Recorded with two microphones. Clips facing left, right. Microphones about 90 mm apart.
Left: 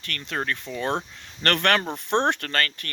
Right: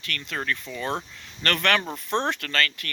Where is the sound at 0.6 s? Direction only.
45° left (ahead or behind).